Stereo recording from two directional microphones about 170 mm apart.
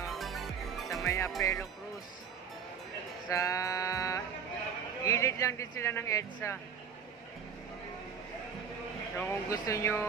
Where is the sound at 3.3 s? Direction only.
20° left (ahead or behind).